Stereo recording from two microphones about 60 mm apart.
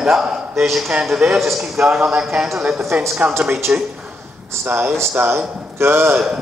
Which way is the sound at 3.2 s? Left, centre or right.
Right.